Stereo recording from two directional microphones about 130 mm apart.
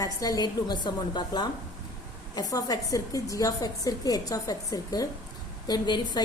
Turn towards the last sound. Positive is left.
turn(degrees=35)  # may be behind; listen again after turning